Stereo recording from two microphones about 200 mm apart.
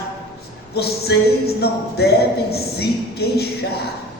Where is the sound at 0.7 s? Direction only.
55° left (ahead or behind).